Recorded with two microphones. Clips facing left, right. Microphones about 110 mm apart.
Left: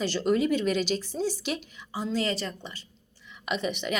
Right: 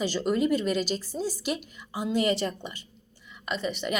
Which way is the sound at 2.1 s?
15° right (ahead or behind).